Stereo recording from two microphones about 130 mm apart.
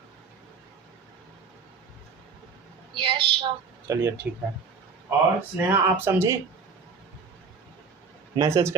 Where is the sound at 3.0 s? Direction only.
40° right (ahead or behind).